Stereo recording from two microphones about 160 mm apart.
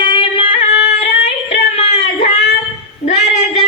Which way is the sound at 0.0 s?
35° left (ahead or behind).